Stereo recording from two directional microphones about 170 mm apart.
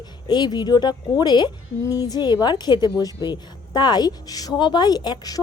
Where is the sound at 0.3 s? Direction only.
25° left (ahead or behind).